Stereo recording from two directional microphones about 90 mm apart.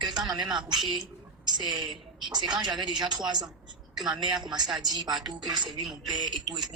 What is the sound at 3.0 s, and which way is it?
A man's voice, 55° right (ahead or behind).